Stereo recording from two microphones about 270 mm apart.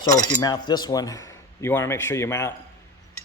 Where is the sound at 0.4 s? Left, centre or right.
Centre.